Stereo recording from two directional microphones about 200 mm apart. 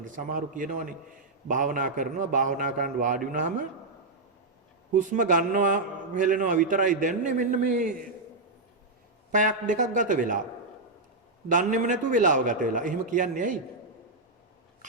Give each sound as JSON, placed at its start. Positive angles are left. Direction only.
{"t": 0.0, "sound": "a man's voice", "side_deg": -40}
{"t": 4.9, "sound": "a man's voice", "side_deg": -40}
{"t": 9.3, "sound": "a man's voice", "side_deg": -40}
{"t": 11.4, "sound": "a man's voice", "side_deg": -40}